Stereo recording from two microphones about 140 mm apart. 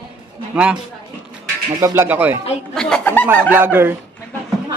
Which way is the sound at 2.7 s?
10° left (ahead or behind).